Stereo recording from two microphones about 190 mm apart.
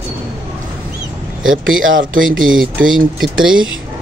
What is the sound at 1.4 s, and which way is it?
Speech, 90° right.